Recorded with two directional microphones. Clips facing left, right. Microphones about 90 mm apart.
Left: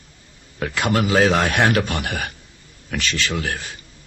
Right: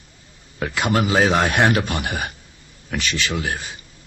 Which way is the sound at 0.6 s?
15° right (ahead or behind).